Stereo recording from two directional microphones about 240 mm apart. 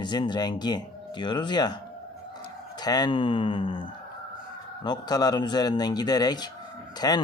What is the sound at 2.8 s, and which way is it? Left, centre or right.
Speech, centre.